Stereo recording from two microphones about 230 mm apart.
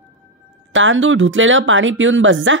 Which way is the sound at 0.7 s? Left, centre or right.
Right.